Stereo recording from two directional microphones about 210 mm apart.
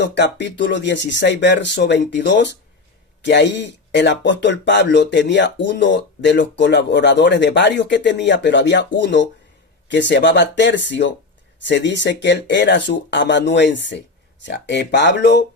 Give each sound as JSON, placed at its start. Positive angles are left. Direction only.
{"t": 0.0, "sound": "speech", "side_deg": 55}